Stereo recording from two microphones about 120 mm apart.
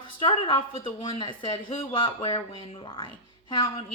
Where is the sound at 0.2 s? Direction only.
45° left (ahead or behind).